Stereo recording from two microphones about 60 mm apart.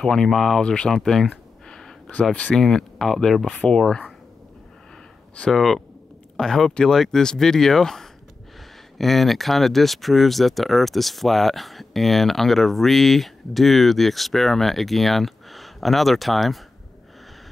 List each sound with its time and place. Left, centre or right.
0.0 s speech: centre
1.7 s a sound: centre
2.5 s speech: centre
5.5 s speech: centre